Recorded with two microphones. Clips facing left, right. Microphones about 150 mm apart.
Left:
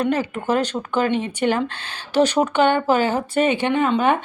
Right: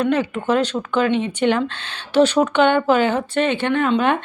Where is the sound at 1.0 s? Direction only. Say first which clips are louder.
Right 2 dB; 50° left (ahead or behind).